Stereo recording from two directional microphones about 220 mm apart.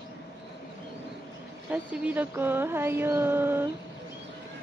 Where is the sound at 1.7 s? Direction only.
5° right (ahead or behind).